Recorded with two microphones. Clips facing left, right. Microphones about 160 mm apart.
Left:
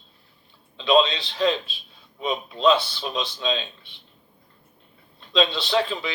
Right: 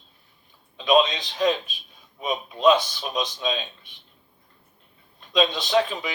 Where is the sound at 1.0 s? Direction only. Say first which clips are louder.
Even; 20° right (ahead or behind).